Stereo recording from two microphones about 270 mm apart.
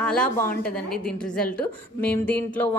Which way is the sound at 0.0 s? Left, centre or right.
Centre.